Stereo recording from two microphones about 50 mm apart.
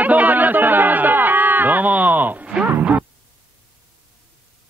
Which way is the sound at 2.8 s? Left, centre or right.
Right.